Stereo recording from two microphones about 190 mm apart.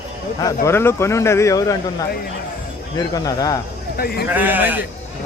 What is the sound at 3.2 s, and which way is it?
Speech, 20° left (ahead or behind).